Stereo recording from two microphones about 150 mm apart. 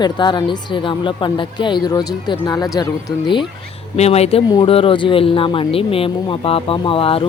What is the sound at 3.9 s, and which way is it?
A woman's voice, 45° left (ahead or behind).